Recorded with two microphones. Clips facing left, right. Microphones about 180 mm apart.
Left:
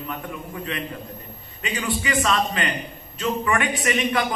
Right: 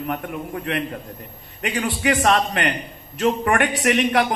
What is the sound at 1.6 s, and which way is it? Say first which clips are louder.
Speech: right 4 dB; 60° right (ahead or behind).